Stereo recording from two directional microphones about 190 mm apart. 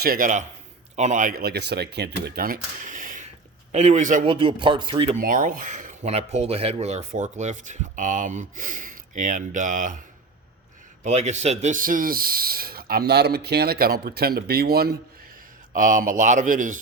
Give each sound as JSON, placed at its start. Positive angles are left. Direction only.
{"t": 0.0, "sound": "a man's voice", "side_deg": -50}
{"t": 4.3, "sound": "speech", "side_deg": -25}
{"t": 5.2, "sound": "speech", "side_deg": -45}
{"t": 11.0, "sound": "a man's voice", "side_deg": -35}
{"t": 15.7, "sound": "a man's voice", "side_deg": -45}